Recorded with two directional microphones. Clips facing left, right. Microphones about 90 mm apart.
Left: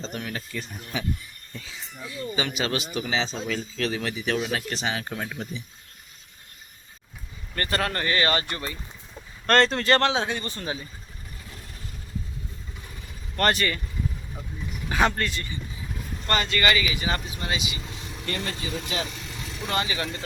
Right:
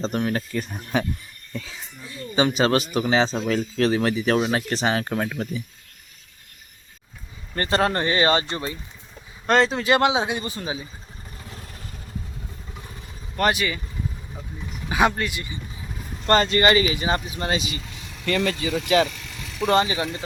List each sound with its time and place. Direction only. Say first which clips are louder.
0.0 s speech: right 9 dB; 40° right (ahead or behind)
2.3 s speech: right 9 dB; 35° right (ahead or behind); by 5.6 s 55° right (ahead or behind)
7.5 s speech: right 6 dB; 25° right (ahead or behind)
9.5 s speech: right 1 dB; 5° right (ahead or behind)
13.3 s speech: right 1 dB; 10° right (ahead or behind)
14.8 s speech: right 3 dB; 10° right (ahead or behind)
16.2 s speech: right 6 dB; 35° right (ahead or behind)
17.4 s speech: right 5 dB; 40° right (ahead or behind)
18.3 s speech: right 8 dB; 90° right
19.6 s speech: right 8 dB; 30° right (ahead or behind)